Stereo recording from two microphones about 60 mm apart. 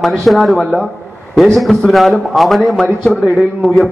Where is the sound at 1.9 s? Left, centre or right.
Centre.